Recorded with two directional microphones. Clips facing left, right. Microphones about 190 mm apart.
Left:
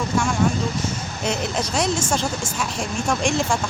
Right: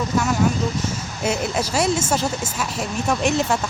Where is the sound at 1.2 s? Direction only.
5° right (ahead or behind).